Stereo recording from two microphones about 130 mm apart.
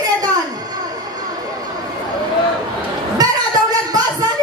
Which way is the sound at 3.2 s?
30° right (ahead or behind).